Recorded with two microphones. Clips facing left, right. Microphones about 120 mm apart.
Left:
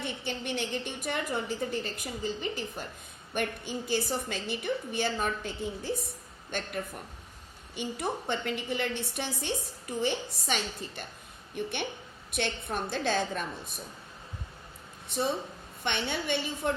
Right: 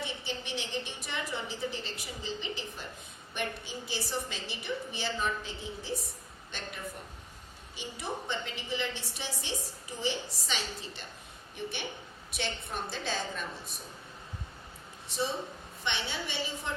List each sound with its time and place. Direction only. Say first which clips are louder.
0.0 s a woman's voice: left 3 dB; 55° left (ahead or behind)
15.1 s a woman's voice: left 3 dB; 55° left (ahead or behind)